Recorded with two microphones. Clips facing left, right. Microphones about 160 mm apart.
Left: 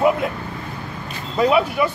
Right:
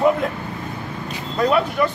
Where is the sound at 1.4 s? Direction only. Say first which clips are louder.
Left 1 dB; 10° left (ahead or behind).